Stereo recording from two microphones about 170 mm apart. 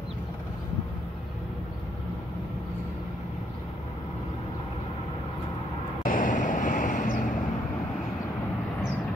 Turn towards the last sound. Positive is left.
turn(degrees=50)  # may be behind; listen again after turning